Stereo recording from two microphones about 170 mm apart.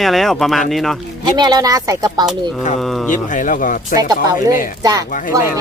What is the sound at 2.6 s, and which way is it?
Speech, 50° left (ahead or behind).